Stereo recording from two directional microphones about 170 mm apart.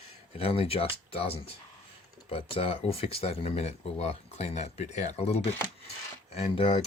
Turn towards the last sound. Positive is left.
turn(degrees=35)  # may be behind; listen again after turning